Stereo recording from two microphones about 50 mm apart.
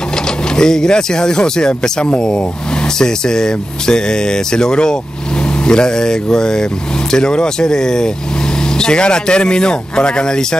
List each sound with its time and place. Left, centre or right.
0.6 s speech: centre